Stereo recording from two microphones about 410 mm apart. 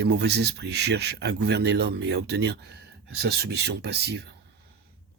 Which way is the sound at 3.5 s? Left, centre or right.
Right.